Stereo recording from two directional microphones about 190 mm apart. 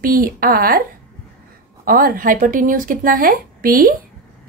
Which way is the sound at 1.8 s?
50° right (ahead or behind).